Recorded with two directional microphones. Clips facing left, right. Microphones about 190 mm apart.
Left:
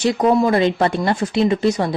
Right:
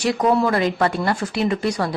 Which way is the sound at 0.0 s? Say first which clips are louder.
Left 3 dB; 20° left (ahead or behind).